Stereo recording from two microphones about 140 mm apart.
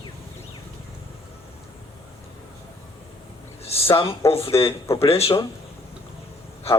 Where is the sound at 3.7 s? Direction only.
45° left (ahead or behind).